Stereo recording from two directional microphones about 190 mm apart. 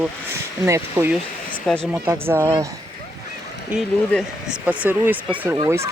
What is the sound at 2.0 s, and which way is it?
Speech, 10° right (ahead or behind).